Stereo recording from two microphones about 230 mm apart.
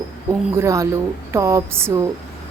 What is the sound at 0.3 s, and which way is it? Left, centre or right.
A woman's voice, centre.